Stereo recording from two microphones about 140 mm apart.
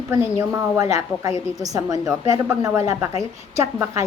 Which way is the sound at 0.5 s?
25° right (ahead or behind).